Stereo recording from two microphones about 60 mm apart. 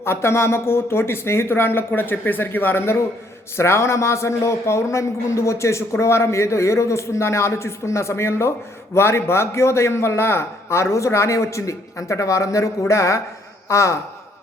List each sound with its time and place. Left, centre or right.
0.0 s speech: left